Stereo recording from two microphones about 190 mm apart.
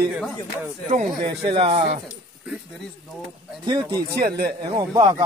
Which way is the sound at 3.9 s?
55° right (ahead or behind).